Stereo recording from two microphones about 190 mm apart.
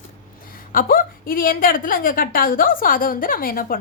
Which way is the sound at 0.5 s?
50° left (ahead or behind).